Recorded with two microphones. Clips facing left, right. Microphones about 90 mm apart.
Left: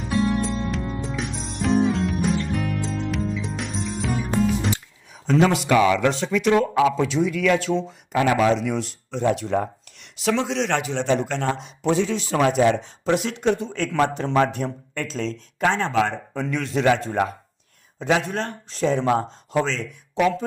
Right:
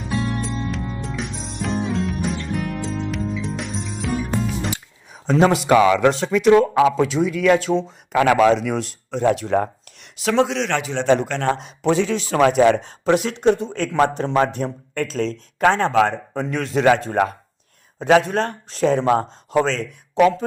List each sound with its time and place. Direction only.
0.0 s music: centre (ahead or behind)
5.2 s a man's voice: 35° right (ahead or behind)
8.1 s speech: 70° right (ahead or behind)
8.4 s speech: 50° right (ahead or behind)
11.0 s speech: 75° right (ahead or behind)
11.3 s speech: 60° right (ahead or behind)
13.4 s a man's voice: 40° right (ahead or behind)
18.9 s speech: 40° right (ahead or behind)